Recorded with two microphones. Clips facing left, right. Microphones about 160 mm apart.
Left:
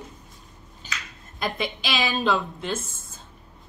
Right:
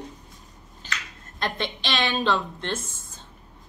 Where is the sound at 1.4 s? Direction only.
5° left (ahead or behind).